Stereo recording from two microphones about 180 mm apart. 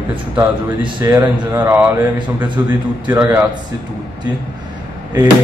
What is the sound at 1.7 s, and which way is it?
Speech, 10° right (ahead or behind).